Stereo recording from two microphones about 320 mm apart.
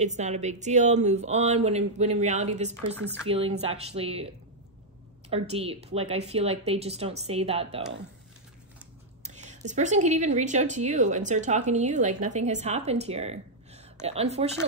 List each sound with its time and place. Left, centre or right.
0.0 s speech: right
5.3 s speech: centre
9.2 s speech: right